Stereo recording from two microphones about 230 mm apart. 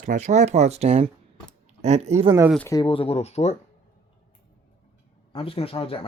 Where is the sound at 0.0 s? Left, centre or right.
Right.